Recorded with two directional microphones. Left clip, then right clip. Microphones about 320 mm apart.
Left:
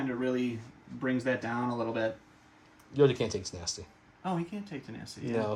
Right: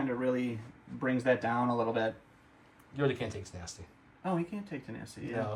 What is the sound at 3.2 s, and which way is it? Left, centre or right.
Speech, centre.